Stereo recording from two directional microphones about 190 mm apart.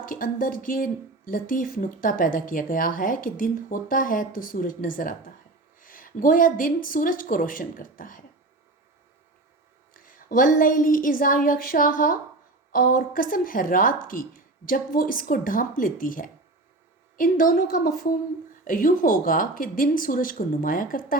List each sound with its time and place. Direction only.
0.0 s speech: 45° left (ahead or behind)
9.9 s speech: 45° left (ahead or behind)